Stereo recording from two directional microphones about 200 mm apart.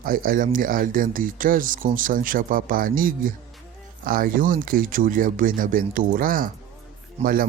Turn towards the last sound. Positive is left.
turn(degrees=-35)  # may be behind; listen again after turning